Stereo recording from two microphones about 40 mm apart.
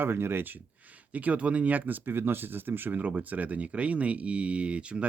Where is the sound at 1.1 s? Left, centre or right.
Right.